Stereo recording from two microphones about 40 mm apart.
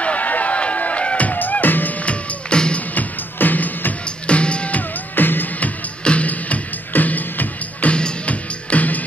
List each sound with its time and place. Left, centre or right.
0.0 s music: left
2.0 s music: left
2.9 s music: left
4.3 s music: left
5.1 s music: left
6.0 s music: left
7.9 s music: left